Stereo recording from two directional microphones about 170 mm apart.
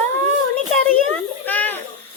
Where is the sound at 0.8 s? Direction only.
10° left (ahead or behind).